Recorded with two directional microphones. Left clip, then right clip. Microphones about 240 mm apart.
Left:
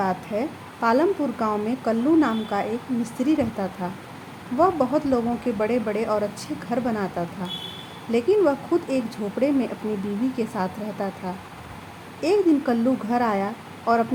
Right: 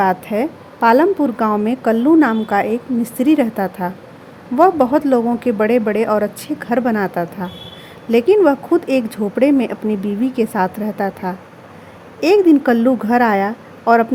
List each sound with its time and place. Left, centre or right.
0.0 s a woman's voice: right